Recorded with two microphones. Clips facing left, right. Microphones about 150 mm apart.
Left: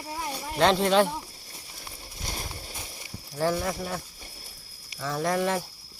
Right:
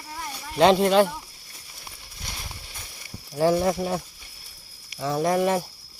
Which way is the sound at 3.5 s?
25° right (ahead or behind).